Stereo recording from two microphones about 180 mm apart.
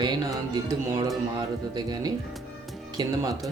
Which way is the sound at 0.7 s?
20° right (ahead or behind).